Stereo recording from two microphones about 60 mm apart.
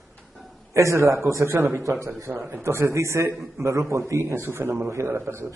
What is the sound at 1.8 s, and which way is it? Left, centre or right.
A man's voice, right.